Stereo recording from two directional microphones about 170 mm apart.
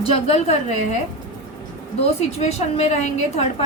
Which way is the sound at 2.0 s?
40° left (ahead or behind).